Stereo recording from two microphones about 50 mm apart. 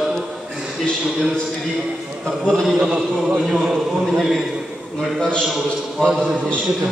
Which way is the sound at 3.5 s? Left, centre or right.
Centre.